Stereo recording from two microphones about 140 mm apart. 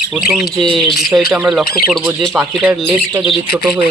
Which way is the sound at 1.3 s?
5° right (ahead or behind).